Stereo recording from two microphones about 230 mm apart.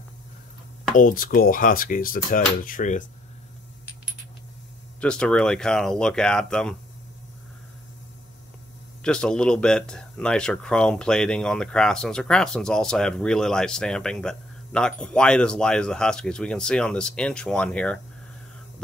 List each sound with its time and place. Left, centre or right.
0.9 s speech: left
5.0 s speech: centre
9.0 s speech: centre